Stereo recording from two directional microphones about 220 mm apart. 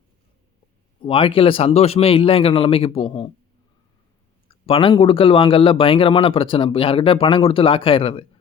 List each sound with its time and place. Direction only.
1.0 s a man's voice: 25° left (ahead or behind)
4.6 s a man's voice: 25° left (ahead or behind)